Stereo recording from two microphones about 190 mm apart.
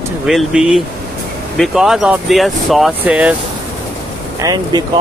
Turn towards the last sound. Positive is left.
turn(degrees=-20)  # may be behind; listen again after turning